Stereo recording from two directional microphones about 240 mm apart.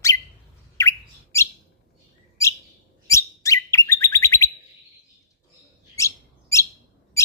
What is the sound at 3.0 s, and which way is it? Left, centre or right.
Bird, centre.